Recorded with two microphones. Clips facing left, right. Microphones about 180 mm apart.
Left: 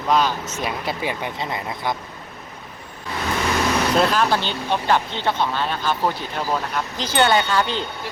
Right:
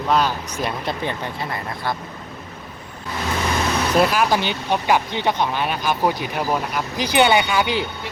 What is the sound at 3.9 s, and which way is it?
Speech, 10° right (ahead or behind).